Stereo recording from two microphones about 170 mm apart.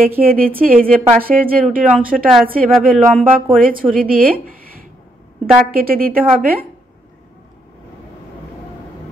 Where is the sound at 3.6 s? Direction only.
55° right (ahead or behind).